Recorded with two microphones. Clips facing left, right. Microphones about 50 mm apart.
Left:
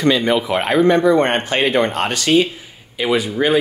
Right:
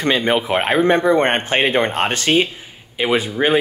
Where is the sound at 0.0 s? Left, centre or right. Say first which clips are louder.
Left 1 dB; right.